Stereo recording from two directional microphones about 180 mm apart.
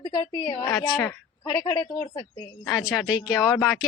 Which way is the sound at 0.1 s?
20° left (ahead or behind).